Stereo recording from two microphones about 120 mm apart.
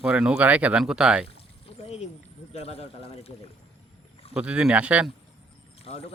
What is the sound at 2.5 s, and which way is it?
Speech, 60° left (ahead or behind).